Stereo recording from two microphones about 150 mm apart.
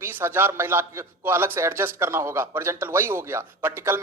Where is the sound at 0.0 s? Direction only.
15° right (ahead or behind).